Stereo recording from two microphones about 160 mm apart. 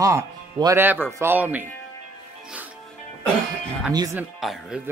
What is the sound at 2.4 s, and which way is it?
Music, 10° right (ahead or behind).